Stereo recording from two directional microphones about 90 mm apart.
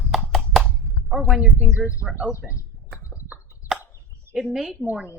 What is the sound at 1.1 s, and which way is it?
Speech, 5° right (ahead or behind).